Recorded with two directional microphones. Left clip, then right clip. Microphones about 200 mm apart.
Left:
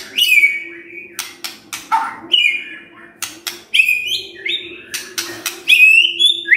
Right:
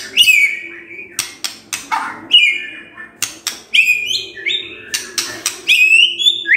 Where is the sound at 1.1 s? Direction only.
5° right (ahead or behind).